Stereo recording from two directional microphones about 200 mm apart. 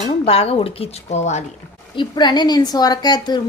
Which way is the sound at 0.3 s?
30° left (ahead or behind).